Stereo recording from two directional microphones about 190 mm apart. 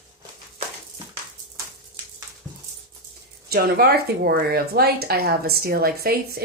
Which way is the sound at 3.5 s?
55° right (ahead or behind).